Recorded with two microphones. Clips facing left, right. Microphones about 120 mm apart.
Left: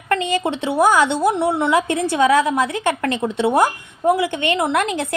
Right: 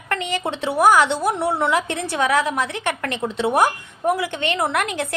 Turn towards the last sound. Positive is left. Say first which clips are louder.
# left 3 dB
turn(degrees=25)  # may be behind; listen again after turning